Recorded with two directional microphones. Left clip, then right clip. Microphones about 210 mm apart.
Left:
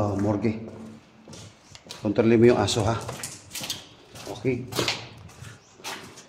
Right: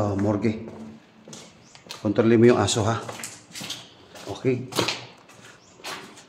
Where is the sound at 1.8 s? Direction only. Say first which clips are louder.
Right 1 dB; centre (ahead or behind).